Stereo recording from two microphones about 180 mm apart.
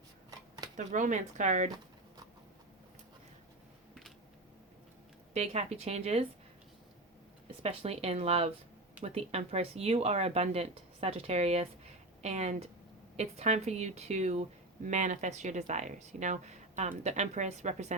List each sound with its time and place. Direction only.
0.8 s speech: 45° right (ahead or behind)
5.3 s speech: 35° right (ahead or behind)
7.6 s speech: 35° right (ahead or behind)